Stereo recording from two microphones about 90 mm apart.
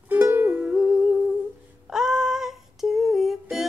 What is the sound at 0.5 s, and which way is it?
Humming, 5° right (ahead or behind).